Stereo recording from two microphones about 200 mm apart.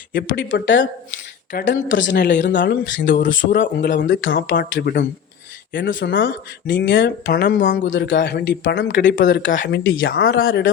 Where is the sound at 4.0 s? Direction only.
70° left (ahead or behind).